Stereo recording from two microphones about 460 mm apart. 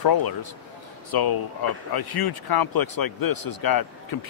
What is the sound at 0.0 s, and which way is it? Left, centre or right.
Speech, left.